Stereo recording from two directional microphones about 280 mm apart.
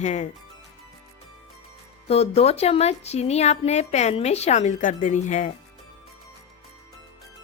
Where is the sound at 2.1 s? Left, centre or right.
Left.